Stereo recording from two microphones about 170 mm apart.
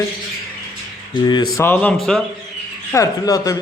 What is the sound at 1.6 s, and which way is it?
Speech, 10° left (ahead or behind).